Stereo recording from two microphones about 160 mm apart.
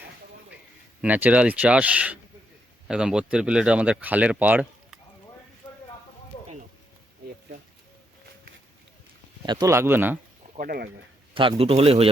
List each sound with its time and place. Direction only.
1.0 s speech: 10° right (ahead or behind)
9.5 s speech: 20° right (ahead or behind)
10.6 s speech: 70° right (ahead or behind)
11.3 s speech: 35° right (ahead or behind)